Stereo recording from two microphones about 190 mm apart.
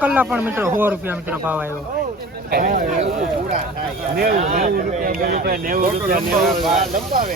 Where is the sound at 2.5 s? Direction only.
50° right (ahead or behind).